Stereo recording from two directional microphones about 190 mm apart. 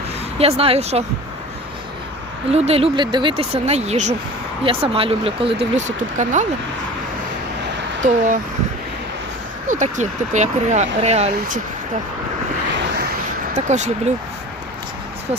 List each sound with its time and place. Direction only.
0.3 s speech: 30° right (ahead or behind)
2.5 s speech: 35° right (ahead or behind)
8.0 s speech: 40° right (ahead or behind)
9.6 s speech: 40° right (ahead or behind)
12.7 s vehicle: 60° right (ahead or behind)
13.7 s speech: 40° right (ahead or behind)